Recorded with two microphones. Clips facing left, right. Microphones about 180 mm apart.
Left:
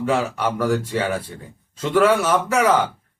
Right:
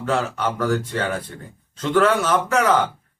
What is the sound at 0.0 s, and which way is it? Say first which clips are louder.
Speech: left 2 dB; 10° left (ahead or behind).